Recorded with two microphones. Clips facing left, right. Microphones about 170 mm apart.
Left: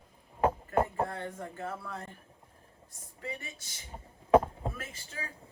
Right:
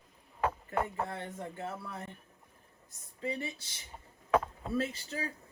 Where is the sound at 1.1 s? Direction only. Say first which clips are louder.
Left 1 dB; 25° right (ahead or behind).